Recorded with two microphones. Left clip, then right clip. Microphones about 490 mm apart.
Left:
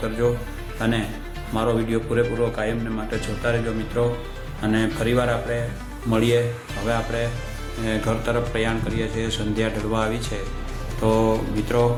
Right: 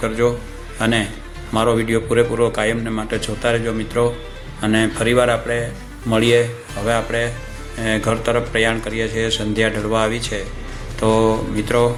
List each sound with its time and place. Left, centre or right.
0.2 s speech: left